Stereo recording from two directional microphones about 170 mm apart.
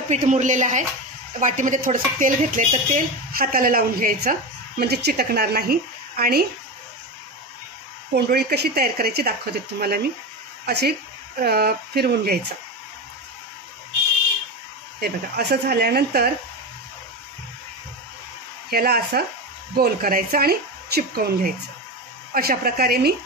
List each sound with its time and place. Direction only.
0.1 s speech: 45° right (ahead or behind); by 6.4 s 65° right (ahead or behind)
8.1 s speech: 70° right (ahead or behind)
15.0 s speech: 70° right (ahead or behind)
18.7 s speech: 65° right (ahead or behind)